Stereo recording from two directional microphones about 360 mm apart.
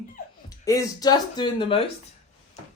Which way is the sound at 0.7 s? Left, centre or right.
Centre.